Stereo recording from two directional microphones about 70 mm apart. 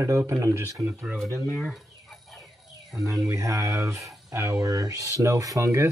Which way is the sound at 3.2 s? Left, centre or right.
Right.